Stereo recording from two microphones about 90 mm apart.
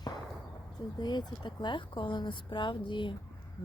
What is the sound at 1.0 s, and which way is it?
Speech, 50° left (ahead or behind).